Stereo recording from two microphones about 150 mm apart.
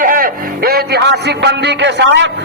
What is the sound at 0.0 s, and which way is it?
Music, 65° right (ahead or behind).